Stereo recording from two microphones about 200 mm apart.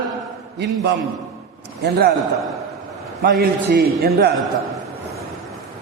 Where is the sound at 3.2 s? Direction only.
50° right (ahead or behind).